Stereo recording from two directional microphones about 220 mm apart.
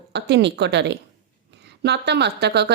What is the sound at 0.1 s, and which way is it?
A woman's voice, 50° right (ahead or behind).